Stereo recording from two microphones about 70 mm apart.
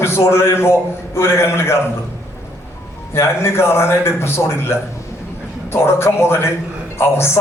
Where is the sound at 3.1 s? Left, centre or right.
Left.